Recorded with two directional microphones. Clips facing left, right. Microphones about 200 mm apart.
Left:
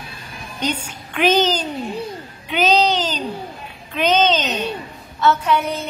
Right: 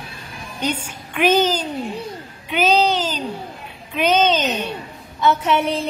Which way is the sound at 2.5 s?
5° right (ahead or behind).